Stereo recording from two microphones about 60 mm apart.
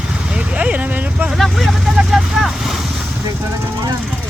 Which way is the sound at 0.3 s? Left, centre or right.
Centre.